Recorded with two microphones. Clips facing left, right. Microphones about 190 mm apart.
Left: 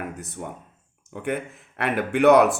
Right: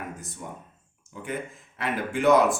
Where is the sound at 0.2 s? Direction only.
60° left (ahead or behind).